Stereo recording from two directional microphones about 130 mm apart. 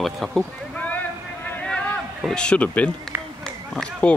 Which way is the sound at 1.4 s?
10° left (ahead or behind).